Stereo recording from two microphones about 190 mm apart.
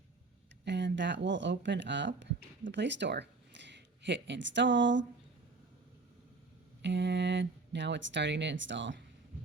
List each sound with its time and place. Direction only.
0.6 s speech: 65° right (ahead or behind)
6.8 s speech: 65° right (ahead or behind)